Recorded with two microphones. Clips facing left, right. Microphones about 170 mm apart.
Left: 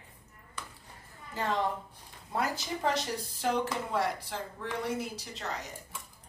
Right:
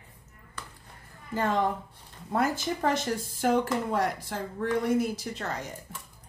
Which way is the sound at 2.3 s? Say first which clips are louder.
Right 5 dB; 50° right (ahead or behind).